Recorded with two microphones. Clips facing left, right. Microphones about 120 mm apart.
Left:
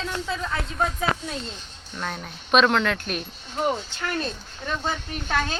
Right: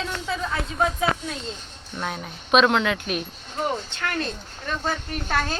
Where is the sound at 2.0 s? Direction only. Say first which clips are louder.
Right 2 dB; 5° right (ahead or behind).